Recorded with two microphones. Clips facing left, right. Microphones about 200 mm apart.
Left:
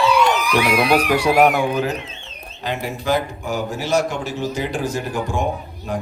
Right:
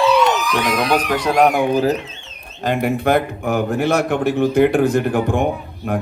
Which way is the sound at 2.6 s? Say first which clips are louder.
Right 6 dB; 55° right (ahead or behind).